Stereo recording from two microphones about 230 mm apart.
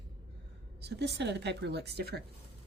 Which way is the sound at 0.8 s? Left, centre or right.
Right.